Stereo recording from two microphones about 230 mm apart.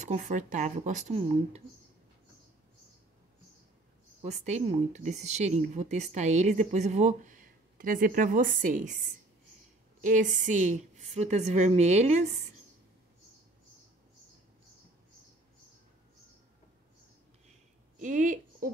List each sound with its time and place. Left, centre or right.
0.0 s speech: right
4.2 s speech: right
10.0 s speech: right
17.9 s a sound: right